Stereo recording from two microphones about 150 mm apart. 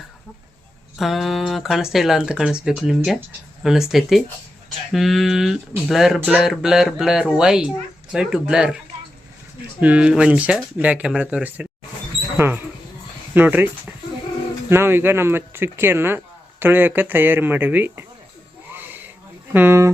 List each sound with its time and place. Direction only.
0.9 s speech: centre (ahead or behind)
9.8 s speech: 10° right (ahead or behind)
13.3 s speech: 10° right (ahead or behind)
18.7 s a sound: 10° right (ahead or behind)
19.5 s speech: 15° right (ahead or behind)